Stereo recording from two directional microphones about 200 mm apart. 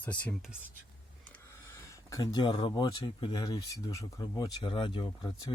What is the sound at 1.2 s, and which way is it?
Speech, 10° left (ahead or behind).